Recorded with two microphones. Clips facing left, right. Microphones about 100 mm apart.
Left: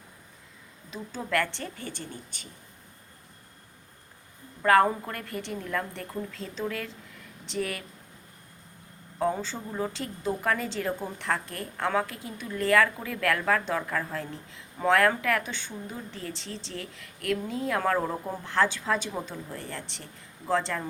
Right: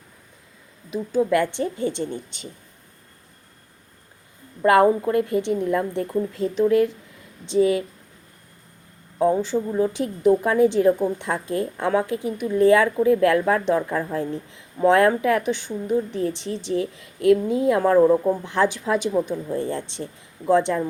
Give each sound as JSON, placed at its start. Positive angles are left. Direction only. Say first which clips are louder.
{"t": 0.9, "sound": "a woman's voice", "louder": "right 12 dB", "side_deg": -15}
{"t": 4.6, "sound": "a woman's voice", "louder": "right 6 dB", "side_deg": -25}
{"t": 9.2, "sound": "a woman's voice", "louder": "right 9 dB", "side_deg": -15}